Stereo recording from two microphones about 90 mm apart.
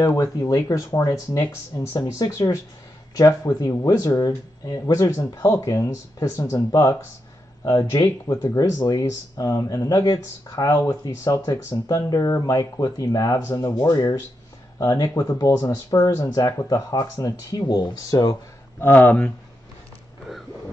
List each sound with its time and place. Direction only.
0.0 s speech: 40° left (ahead or behind)
5.3 s speech: 35° left (ahead or behind)
11.3 s speech: 35° left (ahead or behind)
11.7 s speech: 45° left (ahead or behind)
14.8 s speech: 35° left (ahead or behind); by 18.3 s 50° left (ahead or behind)
18.8 s speech: 20° left (ahead or behind)